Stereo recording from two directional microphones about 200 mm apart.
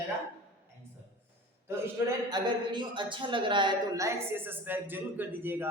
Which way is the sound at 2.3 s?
25° right (ahead or behind).